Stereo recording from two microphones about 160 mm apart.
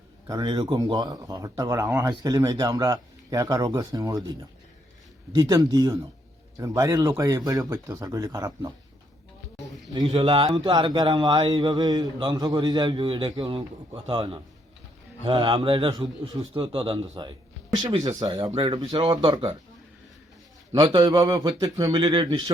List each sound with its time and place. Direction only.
0.3 s speech: 25° right (ahead or behind)
9.9 s a man's voice: 30° right (ahead or behind)
20.8 s speech: 25° right (ahead or behind)